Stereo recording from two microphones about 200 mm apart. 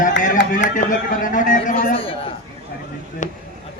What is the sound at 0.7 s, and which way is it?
A man's voice, 40° left (ahead or behind).